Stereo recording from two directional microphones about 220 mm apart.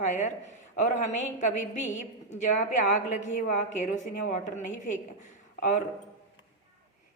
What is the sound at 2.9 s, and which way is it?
A woman's voice, 35° left (ahead or behind).